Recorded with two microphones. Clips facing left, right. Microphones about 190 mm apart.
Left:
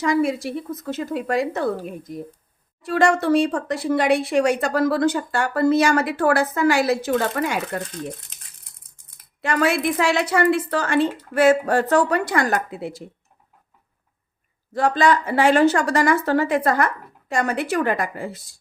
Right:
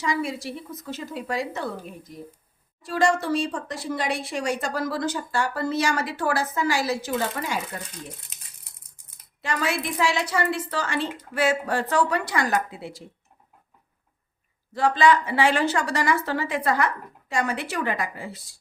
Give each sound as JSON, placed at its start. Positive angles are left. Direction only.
{"t": 0.0, "sound": "a woman's voice", "side_deg": 50}
{"t": 9.4, "sound": "a woman's voice", "side_deg": 55}
{"t": 14.7, "sound": "a woman's voice", "side_deg": 50}